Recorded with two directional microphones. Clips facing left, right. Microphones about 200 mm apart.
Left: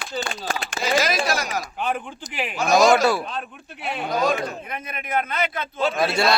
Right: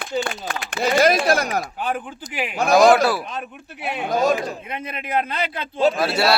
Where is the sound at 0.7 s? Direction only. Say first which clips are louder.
Right 6 dB; 55° right (ahead or behind).